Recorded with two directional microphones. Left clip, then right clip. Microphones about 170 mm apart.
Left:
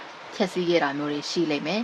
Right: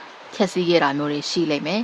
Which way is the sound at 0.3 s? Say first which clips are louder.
Right 4 dB; 20° right (ahead or behind).